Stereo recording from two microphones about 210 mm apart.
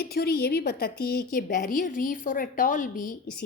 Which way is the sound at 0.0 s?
50° left (ahead or behind).